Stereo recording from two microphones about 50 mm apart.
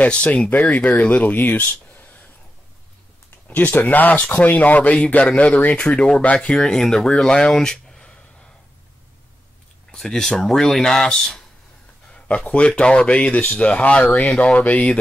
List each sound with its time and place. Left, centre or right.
0.0 s speech: left
0.5 s speech: left
3.4 s speech: left; by 7.2 s centre
7.2 s speech: centre
7.5 s a sound: centre
9.9 s speech: centre
12.1 s speech: centre